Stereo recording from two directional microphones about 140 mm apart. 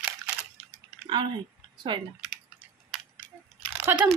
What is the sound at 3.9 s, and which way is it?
Speech, 15° right (ahead or behind).